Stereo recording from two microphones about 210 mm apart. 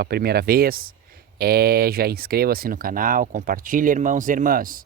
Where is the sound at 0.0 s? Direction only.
45° right (ahead or behind).